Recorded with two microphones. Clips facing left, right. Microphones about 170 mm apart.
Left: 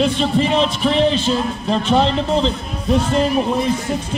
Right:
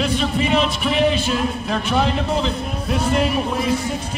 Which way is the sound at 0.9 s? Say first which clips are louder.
Left 3 dB; 10° right (ahead or behind).